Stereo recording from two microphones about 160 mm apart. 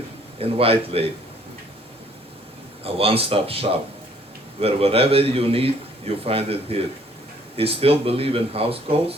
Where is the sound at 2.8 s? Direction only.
35° right (ahead or behind).